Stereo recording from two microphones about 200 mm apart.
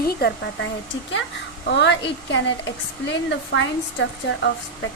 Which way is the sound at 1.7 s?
60° left (ahead or behind).